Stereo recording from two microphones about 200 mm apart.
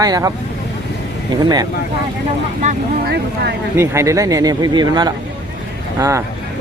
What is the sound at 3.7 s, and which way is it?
Speech, 15° right (ahead or behind).